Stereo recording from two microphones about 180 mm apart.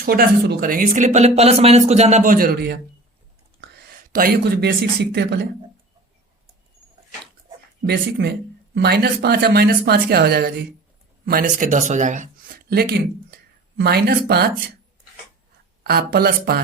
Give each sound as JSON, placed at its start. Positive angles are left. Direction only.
{"t": 0.0, "sound": "speech", "side_deg": -55}
{"t": 7.9, "sound": "speech", "side_deg": -60}
{"t": 11.3, "sound": "speech", "side_deg": -50}
{"t": 12.7, "sound": "speech", "side_deg": -60}
{"t": 15.8, "sound": "speech", "side_deg": -60}